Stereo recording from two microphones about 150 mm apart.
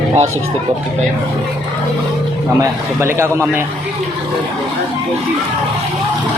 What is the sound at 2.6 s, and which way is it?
Speech, 20° right (ahead or behind).